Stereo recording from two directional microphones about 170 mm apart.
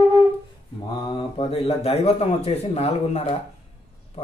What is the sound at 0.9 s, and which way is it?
Mantra, 25° left (ahead or behind).